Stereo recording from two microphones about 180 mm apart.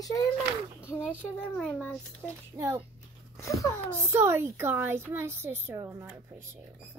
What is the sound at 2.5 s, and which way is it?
Speech, 15° right (ahead or behind).